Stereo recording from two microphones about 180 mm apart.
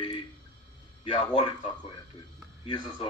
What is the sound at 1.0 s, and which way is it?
A man's voice, 30° left (ahead or behind).